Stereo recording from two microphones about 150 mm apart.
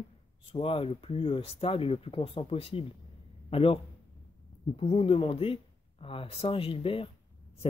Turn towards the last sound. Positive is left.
turn(degrees=35)  # may be behind; listen again after turning